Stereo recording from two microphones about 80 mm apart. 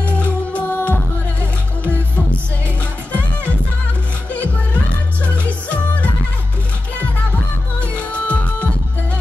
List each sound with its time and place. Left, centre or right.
0.0 s music: centre
5.4 s music: centre
8.1 s music: centre